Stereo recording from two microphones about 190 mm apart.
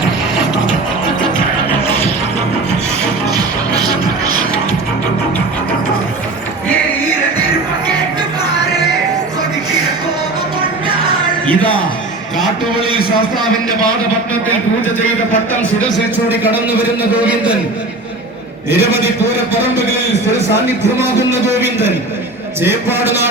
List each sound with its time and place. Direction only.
3.3 s music: 20° right (ahead or behind)
16.3 s a man's voice: 10° right (ahead or behind)
18.7 s a man's voice: 10° right (ahead or behind)
21.2 s a man's voice: 15° right (ahead or behind)